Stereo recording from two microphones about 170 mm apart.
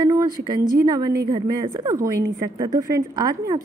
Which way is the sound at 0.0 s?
25° right (ahead or behind).